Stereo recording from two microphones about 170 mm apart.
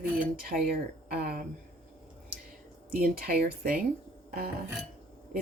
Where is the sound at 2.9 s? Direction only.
65° right (ahead or behind).